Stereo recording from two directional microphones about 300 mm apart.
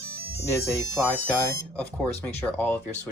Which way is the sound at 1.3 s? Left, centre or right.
Centre.